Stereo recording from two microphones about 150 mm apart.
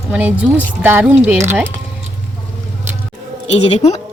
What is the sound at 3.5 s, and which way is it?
Speech, 40° left (ahead or behind).